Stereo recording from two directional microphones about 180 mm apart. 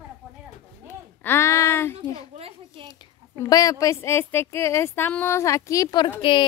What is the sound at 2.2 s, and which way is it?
Speech, 30° right (ahead or behind).